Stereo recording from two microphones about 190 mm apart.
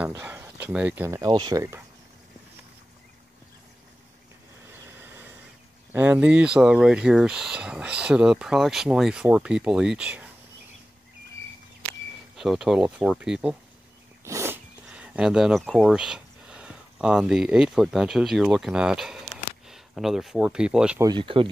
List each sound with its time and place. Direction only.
0.2 s speech: 10° right (ahead or behind)
1.3 s speech: 25° right (ahead or behind)
5.0 s a sound: 10° right (ahead or behind)
5.9 s speech: 10° right (ahead or behind)
12.4 s speech: centre (ahead or behind)
14.2 s speech: 15° right (ahead or behind)
21.0 s speech: 25° right (ahead or behind)